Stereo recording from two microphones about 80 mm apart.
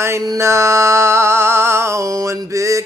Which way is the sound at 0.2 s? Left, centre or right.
Right.